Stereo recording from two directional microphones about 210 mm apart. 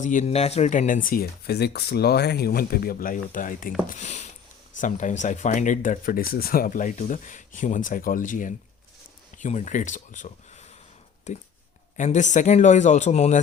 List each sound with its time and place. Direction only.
0.0 s speech: 35° left (ahead or behind)